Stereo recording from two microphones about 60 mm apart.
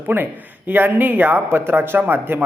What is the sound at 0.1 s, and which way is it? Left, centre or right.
A man's voice, right.